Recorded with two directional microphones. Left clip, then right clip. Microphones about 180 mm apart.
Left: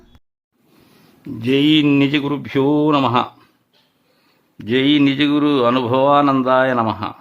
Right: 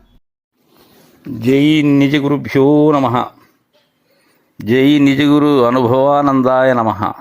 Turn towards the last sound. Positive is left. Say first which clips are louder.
# right 4 dB
turn(degrees=-25)  # may be behind; listen again after turning